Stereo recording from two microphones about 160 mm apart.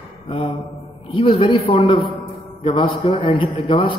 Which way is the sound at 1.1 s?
35° left (ahead or behind).